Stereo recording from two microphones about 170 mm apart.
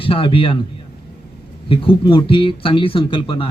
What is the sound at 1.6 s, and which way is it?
Speech, 30° left (ahead or behind).